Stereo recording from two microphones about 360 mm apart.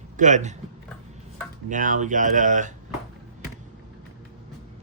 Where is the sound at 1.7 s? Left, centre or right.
Right.